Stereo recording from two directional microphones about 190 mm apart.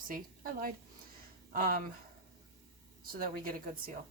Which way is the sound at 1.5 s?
50° right (ahead or behind).